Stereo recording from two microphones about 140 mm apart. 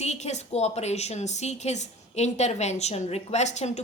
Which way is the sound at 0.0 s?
50° left (ahead or behind).